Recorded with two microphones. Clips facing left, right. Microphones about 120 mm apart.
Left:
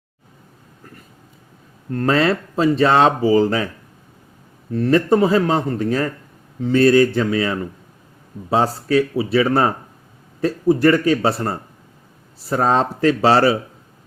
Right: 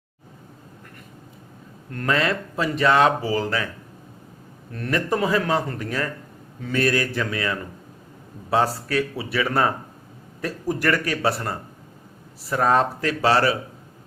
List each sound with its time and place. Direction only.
1.9 s speech: 30° left (ahead or behind)
4.7 s speech: 30° left (ahead or behind)